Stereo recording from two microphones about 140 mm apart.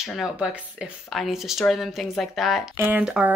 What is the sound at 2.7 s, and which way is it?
Speech, 15° right (ahead or behind).